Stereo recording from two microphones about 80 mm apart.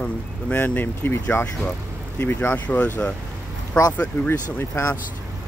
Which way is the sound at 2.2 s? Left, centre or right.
Left.